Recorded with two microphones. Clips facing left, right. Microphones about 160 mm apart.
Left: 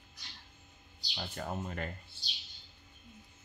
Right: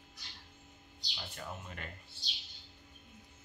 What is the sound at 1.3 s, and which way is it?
Speech, 45° left (ahead or behind).